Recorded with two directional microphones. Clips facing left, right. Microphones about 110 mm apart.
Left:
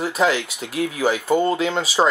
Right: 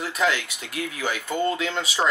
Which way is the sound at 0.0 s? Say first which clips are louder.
Left 5 dB; 30° left (ahead or behind).